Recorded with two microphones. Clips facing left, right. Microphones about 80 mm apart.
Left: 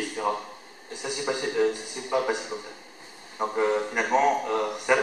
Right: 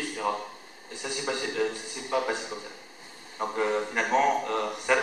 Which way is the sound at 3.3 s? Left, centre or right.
Centre.